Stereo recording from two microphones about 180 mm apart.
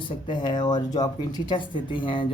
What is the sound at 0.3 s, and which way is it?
Speech, 25° left (ahead or behind).